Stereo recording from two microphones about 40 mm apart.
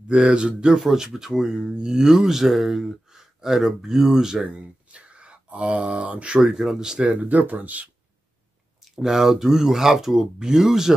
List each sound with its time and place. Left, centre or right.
0.1 s speech: right
0.7 s speech: centre
4.8 s a sound: right
6.4 s speech: centre
7.2 s speech: right
8.8 s speech: centre